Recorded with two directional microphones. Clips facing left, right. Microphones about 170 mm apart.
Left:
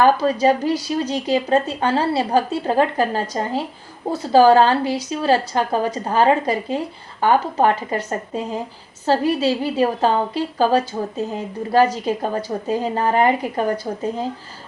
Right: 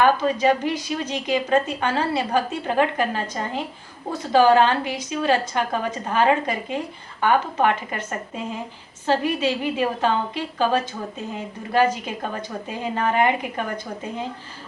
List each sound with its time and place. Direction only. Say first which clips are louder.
0.0 s speech: left 3 dB; 35° left (ahead or behind)